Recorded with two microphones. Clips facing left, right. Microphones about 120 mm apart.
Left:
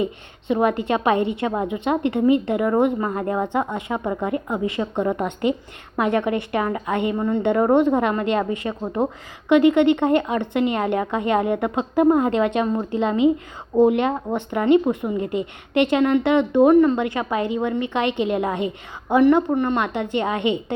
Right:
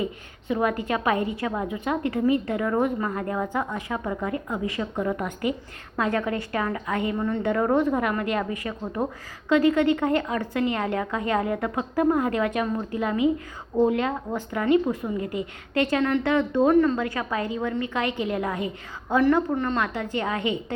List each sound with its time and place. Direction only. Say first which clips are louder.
0.0 s speech: left 5 dB; 25° left (ahead or behind)